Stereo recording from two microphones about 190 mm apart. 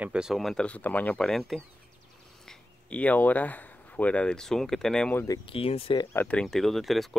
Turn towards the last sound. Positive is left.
turn(degrees=0)  # may be behind; listen again after turning